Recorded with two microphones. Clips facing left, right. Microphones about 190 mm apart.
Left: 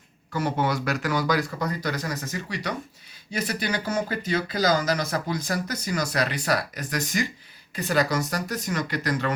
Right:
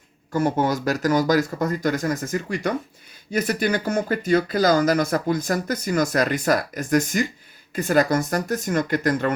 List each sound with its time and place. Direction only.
0.3 s speech: 45° right (ahead or behind)